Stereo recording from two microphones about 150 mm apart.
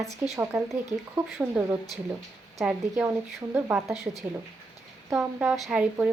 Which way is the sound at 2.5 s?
5° right (ahead or behind).